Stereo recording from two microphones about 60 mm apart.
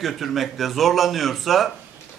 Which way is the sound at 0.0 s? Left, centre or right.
Centre.